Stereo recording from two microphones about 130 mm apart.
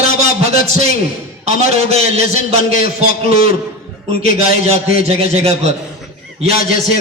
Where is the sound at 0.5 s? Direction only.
55° right (ahead or behind).